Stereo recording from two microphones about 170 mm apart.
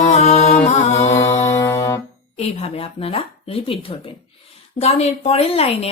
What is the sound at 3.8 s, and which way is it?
Speech, 30° left (ahead or behind).